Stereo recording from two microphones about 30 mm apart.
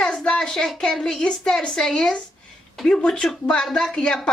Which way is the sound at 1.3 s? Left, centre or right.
Centre.